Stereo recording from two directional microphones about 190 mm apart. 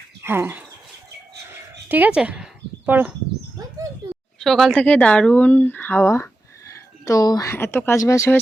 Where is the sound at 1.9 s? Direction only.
5° right (ahead or behind).